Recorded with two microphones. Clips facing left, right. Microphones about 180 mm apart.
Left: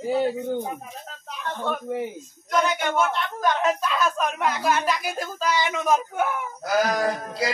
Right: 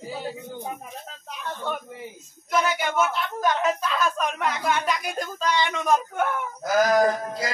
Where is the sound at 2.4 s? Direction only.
5° right (ahead or behind).